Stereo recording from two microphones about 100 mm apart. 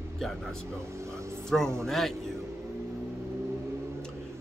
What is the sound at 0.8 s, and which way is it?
Speech, 30° right (ahead or behind).